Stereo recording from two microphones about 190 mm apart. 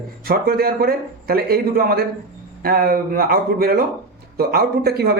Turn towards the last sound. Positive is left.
turn(degrees=-55)  # may be behind; listen again after turning